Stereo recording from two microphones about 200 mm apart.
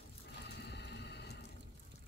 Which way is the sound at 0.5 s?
60° left (ahead or behind).